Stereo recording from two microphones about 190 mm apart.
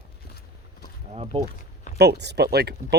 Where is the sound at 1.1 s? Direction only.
30° right (ahead or behind).